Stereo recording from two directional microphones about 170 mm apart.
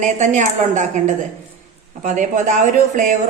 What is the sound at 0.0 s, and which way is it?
A man's voice, 45° right (ahead or behind).